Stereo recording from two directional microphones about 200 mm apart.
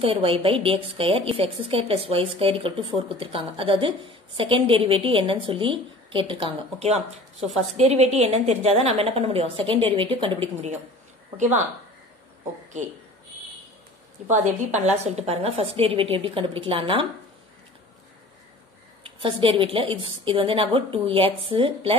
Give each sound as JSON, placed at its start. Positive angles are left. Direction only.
{"t": 0.0, "sound": "a woman's voice", "side_deg": -30}
{"t": 14.3, "sound": "a woman's voice", "side_deg": -40}
{"t": 19.0, "sound": "a woman's voice", "side_deg": -25}